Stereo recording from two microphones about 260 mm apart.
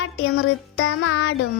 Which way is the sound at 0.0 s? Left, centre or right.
Left.